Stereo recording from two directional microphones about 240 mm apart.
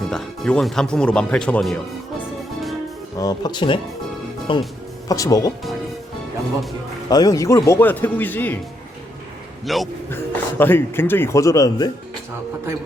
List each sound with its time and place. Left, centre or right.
0.1 s speech: centre
3.2 s speech: centre
7.1 s speech: centre
9.6 s speech: centre